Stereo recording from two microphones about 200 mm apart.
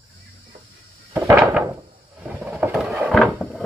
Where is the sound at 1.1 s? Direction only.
10° right (ahead or behind).